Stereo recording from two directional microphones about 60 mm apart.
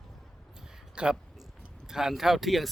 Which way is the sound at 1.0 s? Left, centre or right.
Centre.